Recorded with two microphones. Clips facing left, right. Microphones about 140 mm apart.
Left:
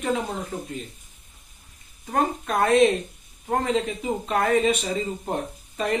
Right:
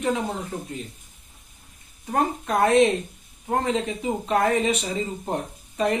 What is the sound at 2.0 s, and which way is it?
Speech, 15° right (ahead or behind).